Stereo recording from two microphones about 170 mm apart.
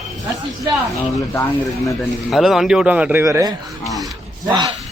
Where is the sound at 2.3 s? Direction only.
Centre (ahead or behind).